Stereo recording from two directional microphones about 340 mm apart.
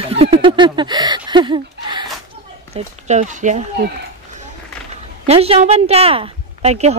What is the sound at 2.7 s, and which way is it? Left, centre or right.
Speech, centre.